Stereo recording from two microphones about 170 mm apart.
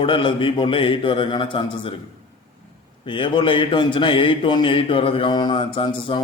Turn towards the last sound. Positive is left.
turn(degrees=30)  # may be behind; listen again after turning